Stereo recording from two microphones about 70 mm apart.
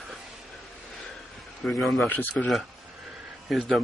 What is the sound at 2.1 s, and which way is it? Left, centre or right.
Speech, left.